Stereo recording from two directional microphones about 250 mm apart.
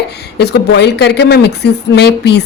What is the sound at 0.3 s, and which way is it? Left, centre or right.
A woman's voice, left.